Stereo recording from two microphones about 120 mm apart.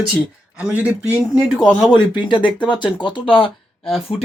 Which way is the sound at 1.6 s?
10° left (ahead or behind).